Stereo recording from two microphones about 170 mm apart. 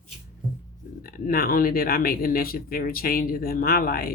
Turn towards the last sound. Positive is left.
turn(degrees=60)  # may be behind; listen again after turning